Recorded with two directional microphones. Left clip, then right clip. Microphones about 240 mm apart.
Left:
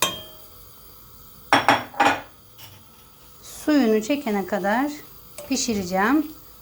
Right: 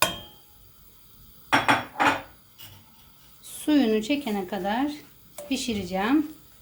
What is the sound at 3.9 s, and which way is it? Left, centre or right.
A woman's voice, centre.